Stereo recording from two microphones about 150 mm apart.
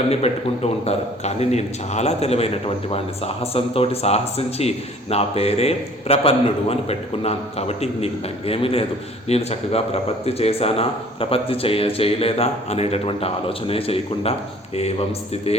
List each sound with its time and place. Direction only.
0.1 s a man's voice: 45° left (ahead or behind)